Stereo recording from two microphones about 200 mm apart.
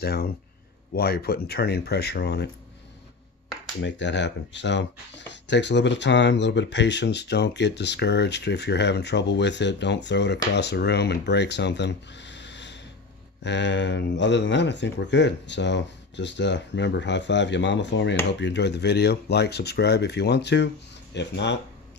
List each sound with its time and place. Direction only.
0.0 s speech: 50° left (ahead or behind)
3.8 s speech: 60° left (ahead or behind)